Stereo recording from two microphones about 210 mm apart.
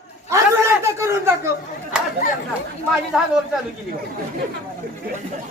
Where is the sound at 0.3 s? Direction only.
15° right (ahead or behind).